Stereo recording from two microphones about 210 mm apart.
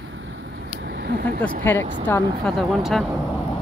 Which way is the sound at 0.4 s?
50° right (ahead or behind).